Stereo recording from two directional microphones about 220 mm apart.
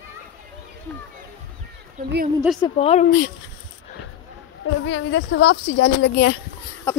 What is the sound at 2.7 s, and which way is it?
Speech, 30° left (ahead or behind).